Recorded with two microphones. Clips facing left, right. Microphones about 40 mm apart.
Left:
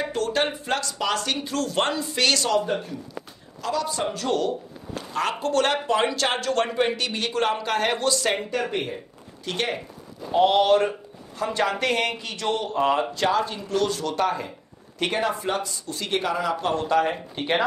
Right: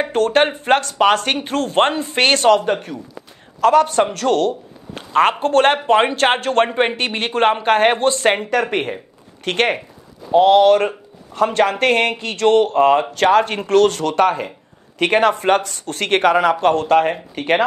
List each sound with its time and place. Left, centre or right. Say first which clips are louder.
0.0 s speech: right 9 dB; right
4.9 s a sound: right 11 dB; right
5.4 s speech: right 8 dB; right
8.5 s speech: right 8 dB; right